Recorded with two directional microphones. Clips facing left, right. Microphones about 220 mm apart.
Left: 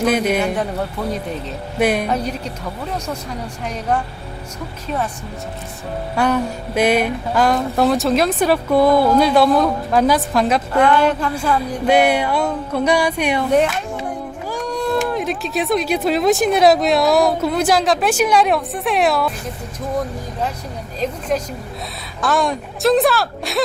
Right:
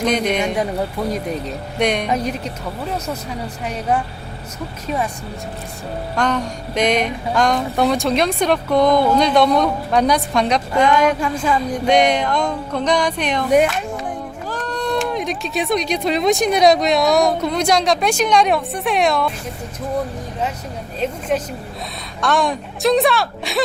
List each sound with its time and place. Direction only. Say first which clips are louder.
0.0 s speech: left 2 dB; 5° left (ahead or behind)
1.8 s speech: left 2 dB; 5° left (ahead or behind)
2.1 s a woman's voice: right 1 dB; 35° left (ahead or behind)
3.7 s speech: right 1 dB; 5° right (ahead or behind)
6.1 s speech: left 3 dB; 10° left (ahead or behind)
10.8 s speech: even; 10° right (ahead or behind)
11.5 s speech: left 1 dB; 5° left (ahead or behind)
14.5 s speech: left 2 dB; 10° left (ahead or behind)
22.2 s speech: even; centre (ahead or behind)